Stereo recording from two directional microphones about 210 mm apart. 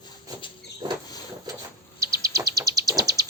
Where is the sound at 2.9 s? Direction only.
15° right (ahead or behind).